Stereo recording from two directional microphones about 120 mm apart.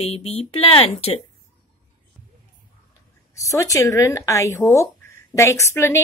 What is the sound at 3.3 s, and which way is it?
A woman's voice, 25° left (ahead or behind).